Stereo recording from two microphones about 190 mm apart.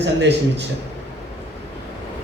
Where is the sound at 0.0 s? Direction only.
65° right (ahead or behind).